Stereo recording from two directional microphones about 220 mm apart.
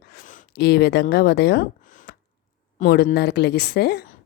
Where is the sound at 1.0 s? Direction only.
45° left (ahead or behind).